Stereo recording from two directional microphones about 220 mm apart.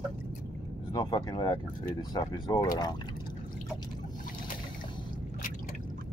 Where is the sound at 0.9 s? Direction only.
20° left (ahead or behind).